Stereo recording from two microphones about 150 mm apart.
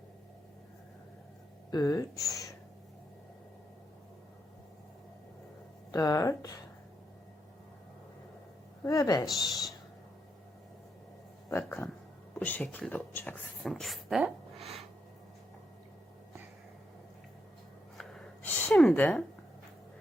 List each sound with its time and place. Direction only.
1.7 s speech: 25° left (ahead or behind)
5.9 s speech: 25° left (ahead or behind)
8.8 s speech: 25° left (ahead or behind)
9.5 s speech: centre (ahead or behind)
11.4 s speech: 15° left (ahead or behind); by 14.7 s 5° right (ahead or behind)
17.9 s a sound: 5° left (ahead or behind)